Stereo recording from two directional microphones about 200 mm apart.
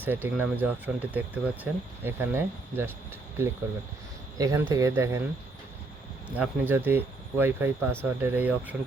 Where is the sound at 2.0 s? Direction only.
10° right (ahead or behind).